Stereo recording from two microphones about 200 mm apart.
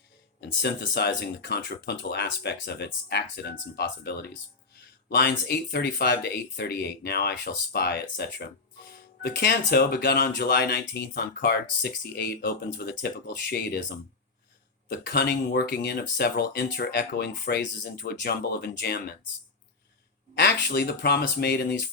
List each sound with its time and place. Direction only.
0.4 s speech: 55° left (ahead or behind)
14.8 s speech: 50° left (ahead or behind)
20.4 s speech: 50° left (ahead or behind)